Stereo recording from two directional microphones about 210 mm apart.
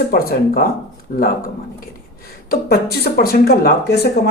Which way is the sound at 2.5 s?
50° left (ahead or behind).